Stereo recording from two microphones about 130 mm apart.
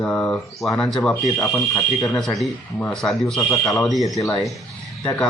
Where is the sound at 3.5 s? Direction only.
25° left (ahead or behind).